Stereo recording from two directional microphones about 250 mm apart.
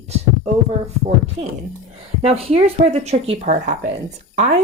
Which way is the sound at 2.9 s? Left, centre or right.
Right.